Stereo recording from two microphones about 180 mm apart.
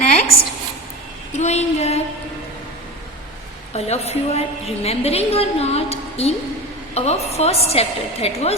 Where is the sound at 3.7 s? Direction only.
35° left (ahead or behind).